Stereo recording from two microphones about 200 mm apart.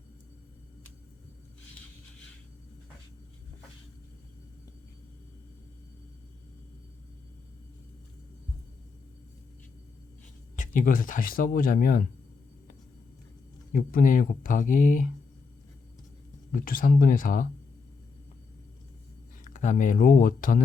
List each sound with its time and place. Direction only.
10.8 s speech: 40° left (ahead or behind)
13.7 s speech: 45° left (ahead or behind)
16.5 s speech: 45° left (ahead or behind)
19.5 s speech: 40° left (ahead or behind)